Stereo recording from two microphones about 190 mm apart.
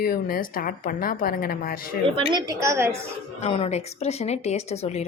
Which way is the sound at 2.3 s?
20° right (ahead or behind).